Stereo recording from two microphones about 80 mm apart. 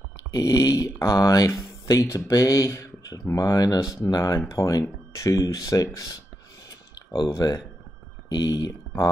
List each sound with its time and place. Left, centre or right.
0.3 s speech: left
7.2 s speech: left
8.3 s speech: left